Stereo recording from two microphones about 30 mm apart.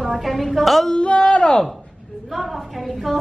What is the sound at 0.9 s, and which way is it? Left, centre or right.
Speech, left.